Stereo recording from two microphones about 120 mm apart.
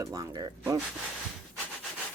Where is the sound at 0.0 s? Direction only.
30° right (ahead or behind).